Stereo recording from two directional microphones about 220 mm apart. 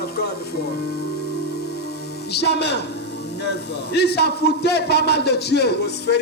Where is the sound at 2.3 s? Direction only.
50° left (ahead or behind).